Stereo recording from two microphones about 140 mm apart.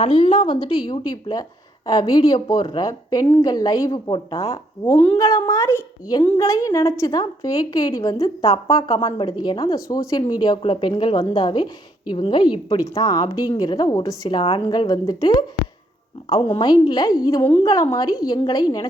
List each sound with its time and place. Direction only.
0.0 s a woman's voice: 45° left (ahead or behind)
0.9 s a woman's voice: 30° left (ahead or behind)
14.7 s a woman's voice: 30° left (ahead or behind)
16.5 s a woman's voice: 30° left (ahead or behind)